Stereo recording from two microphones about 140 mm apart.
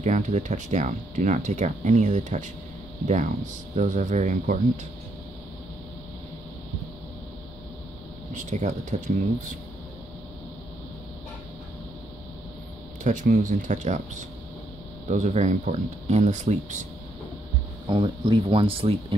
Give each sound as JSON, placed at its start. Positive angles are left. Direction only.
{"t": 0.0, "sound": "speech", "side_deg": -60}
{"t": 3.7, "sound": "speech", "side_deg": -60}
{"t": 8.3, "sound": "speech", "side_deg": -60}
{"t": 13.0, "sound": "speech", "side_deg": -65}
{"t": 15.0, "sound": "speech", "side_deg": -60}
{"t": 17.8, "sound": "speech", "side_deg": -35}